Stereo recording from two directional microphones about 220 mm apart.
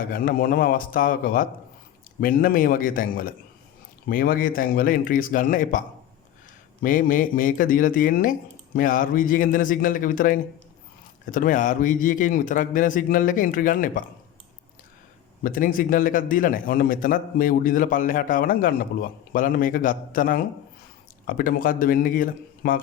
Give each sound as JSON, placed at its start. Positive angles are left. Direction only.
{"t": 0.0, "sound": "a man's voice", "side_deg": 40}
{"t": 6.8, "sound": "a man's voice", "side_deg": 40}
{"t": 15.4, "sound": "a man's voice", "side_deg": 40}